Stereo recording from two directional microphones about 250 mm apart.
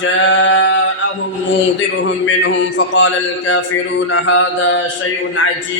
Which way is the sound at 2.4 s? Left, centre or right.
Left.